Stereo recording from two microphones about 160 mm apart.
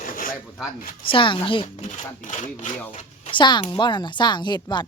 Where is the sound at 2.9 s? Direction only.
45° left (ahead or behind).